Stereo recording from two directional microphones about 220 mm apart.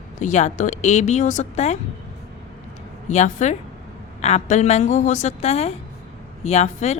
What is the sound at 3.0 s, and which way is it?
A woman's voice, 35° left (ahead or behind).